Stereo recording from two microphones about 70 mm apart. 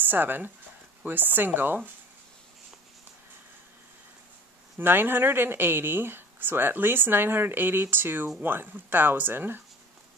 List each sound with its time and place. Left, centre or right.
0.0 s speech: right
4.7 s speech: right